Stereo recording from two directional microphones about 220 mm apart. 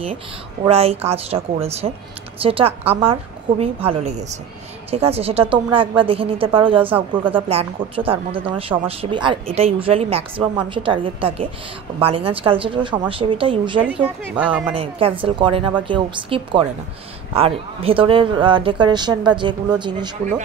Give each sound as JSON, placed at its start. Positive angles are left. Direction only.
{"t": 0.7, "sound": "speech", "side_deg": -25}
{"t": 6.8, "sound": "speech", "side_deg": -10}
{"t": 7.3, "sound": "speech", "side_deg": -25}
{"t": 14.3, "sound": "speech", "side_deg": -5}
{"t": 14.7, "sound": "speech", "side_deg": -25}